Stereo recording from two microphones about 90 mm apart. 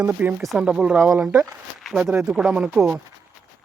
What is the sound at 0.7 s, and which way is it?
Speech, 10° right (ahead or behind).